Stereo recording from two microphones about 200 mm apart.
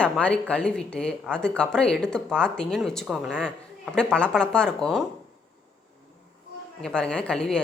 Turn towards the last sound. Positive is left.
turn(degrees=5)  # may be behind; listen again after turning